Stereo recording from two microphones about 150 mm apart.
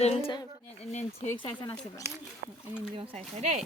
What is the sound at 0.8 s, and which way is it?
Speech, 45° left (ahead or behind).